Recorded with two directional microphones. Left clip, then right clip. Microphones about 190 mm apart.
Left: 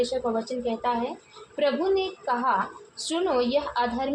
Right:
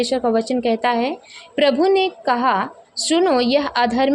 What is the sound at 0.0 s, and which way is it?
A woman's voice, 40° right (ahead or behind).